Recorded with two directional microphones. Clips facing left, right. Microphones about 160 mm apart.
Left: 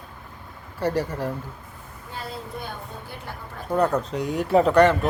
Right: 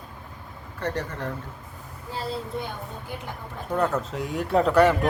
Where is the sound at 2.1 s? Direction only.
30° right (ahead or behind).